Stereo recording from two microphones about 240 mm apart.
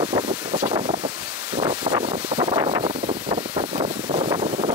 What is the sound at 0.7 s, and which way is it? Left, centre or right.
Wind noise, centre.